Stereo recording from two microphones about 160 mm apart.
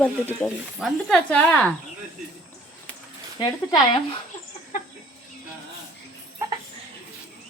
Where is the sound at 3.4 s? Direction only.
25° left (ahead or behind).